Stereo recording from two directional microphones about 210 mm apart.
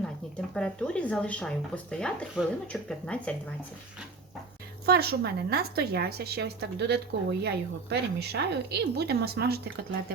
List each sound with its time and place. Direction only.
0.5 s speech: 5° left (ahead or behind)
4.9 s a woman's voice: 50° right (ahead or behind)